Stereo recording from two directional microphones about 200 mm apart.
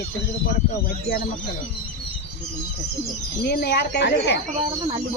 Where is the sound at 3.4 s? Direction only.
55° left (ahead or behind).